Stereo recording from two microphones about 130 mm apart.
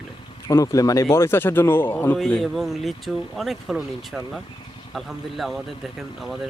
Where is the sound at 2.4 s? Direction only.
Centre (ahead or behind).